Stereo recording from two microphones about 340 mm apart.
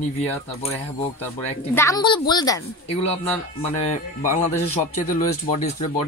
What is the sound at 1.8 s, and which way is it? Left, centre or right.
Speech, centre.